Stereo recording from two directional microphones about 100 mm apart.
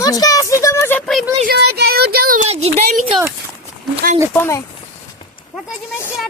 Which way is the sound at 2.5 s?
90° right.